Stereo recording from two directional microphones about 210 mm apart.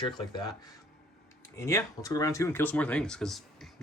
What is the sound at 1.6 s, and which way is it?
Speech, 15° left (ahead or behind).